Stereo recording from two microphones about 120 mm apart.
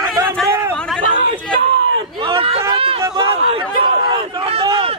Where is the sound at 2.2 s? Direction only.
50° right (ahead or behind).